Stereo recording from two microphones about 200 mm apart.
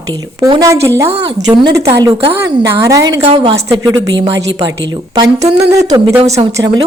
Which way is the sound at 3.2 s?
30° right (ahead or behind).